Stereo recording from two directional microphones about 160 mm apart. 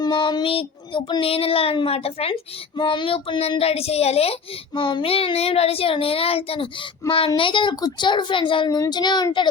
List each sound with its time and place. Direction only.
0.0 s a child's voice: 25° left (ahead or behind)